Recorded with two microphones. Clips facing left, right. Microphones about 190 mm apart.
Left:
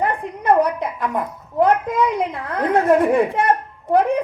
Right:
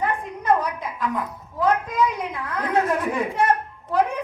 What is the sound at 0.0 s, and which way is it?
A child's voice, 60° left (ahead or behind).